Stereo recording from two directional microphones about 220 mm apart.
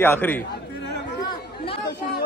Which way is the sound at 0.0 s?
10° left (ahead or behind).